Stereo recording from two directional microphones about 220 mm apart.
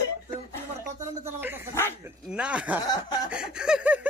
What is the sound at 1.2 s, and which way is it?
Speech, 10° right (ahead or behind).